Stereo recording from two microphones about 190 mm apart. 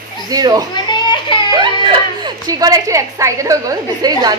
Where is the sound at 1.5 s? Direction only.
25° right (ahead or behind).